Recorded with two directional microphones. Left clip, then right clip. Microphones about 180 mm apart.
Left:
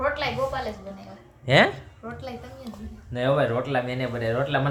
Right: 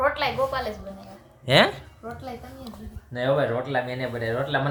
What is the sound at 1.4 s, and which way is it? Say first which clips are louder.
Speech: even; centre (ahead or behind).